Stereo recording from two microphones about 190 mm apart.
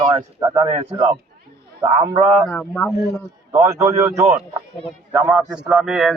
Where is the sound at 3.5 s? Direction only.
20° right (ahead or behind).